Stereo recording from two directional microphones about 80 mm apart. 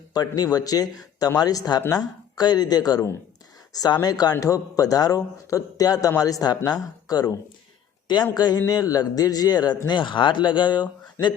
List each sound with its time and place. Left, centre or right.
0.1 s a man's voice: left
8.0 s a man's voice: left